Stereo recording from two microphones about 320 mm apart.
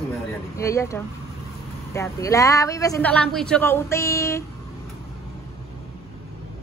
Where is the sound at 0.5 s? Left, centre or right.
Centre.